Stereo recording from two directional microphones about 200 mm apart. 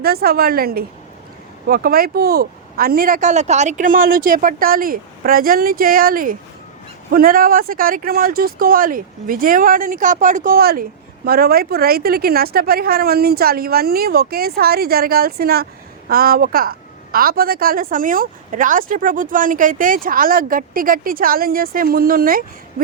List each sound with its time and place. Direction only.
0.0 s a woman's voice: 50° right (ahead or behind)